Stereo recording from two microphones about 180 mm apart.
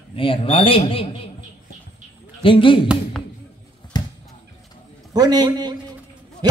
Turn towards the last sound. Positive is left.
turn(degrees=-25)  # may be behind; listen again after turning